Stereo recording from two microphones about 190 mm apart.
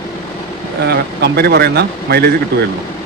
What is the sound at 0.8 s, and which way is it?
Speech, 55° right (ahead or behind).